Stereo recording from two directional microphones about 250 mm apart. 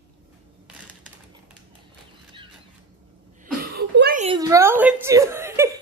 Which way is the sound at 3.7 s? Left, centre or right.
Right.